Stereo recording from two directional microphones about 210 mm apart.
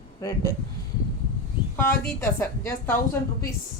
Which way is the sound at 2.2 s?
15° left (ahead or behind).